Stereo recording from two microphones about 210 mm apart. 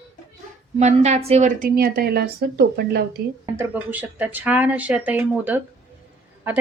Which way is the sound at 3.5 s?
10° right (ahead or behind).